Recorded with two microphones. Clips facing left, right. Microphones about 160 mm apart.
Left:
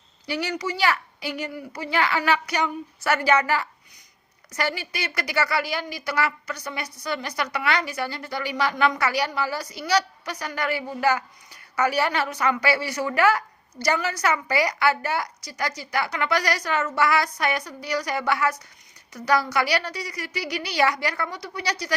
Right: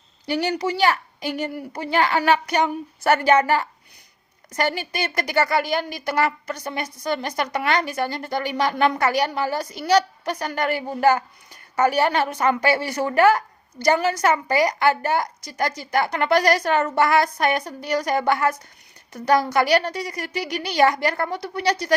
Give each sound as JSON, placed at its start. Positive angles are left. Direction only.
{"t": 0.5, "sound": "speech", "side_deg": -60}
{"t": 0.9, "sound": "a woman's voice", "side_deg": -50}